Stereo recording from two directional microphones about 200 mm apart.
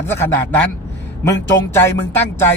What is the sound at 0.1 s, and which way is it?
Speech, 10° left (ahead or behind).